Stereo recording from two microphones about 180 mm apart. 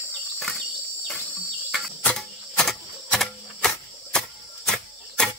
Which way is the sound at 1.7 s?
Centre (ahead or behind).